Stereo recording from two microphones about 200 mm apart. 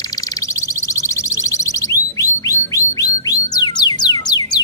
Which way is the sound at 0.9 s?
15° left (ahead or behind).